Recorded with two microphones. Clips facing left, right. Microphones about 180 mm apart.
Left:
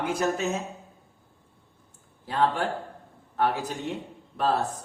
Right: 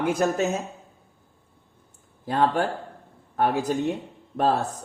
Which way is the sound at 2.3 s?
45° right (ahead or behind).